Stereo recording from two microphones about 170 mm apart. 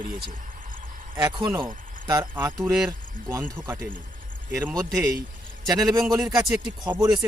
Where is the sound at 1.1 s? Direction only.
25° right (ahead or behind).